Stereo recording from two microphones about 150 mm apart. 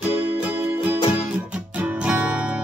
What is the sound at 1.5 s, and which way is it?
Music, 10° right (ahead or behind).